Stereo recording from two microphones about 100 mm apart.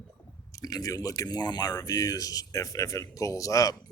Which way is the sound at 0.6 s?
40° left (ahead or behind).